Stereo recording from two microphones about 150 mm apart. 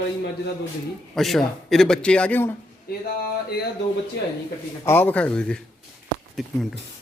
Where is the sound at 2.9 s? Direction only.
90° left.